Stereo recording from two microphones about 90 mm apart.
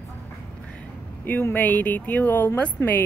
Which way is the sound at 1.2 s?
20° left (ahead or behind).